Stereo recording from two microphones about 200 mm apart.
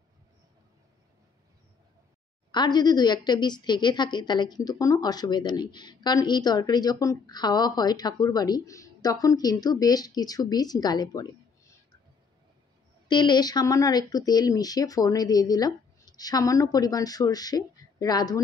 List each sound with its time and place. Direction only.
2.5 s a woman's voice: 20° left (ahead or behind)
13.1 s a woman's voice: 20° left (ahead or behind)